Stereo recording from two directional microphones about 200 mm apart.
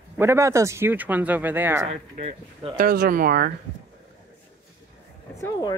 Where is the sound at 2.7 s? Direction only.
50° right (ahead or behind).